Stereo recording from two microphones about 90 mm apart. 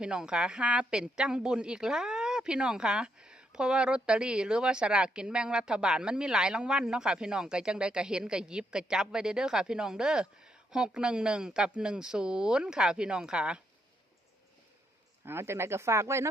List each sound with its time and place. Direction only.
0.0 s a woman's voice: 10° right (ahead or behind)
15.2 s speech: 25° right (ahead or behind)